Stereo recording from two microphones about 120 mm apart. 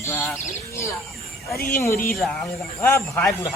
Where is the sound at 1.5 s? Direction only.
25° left (ahead or behind).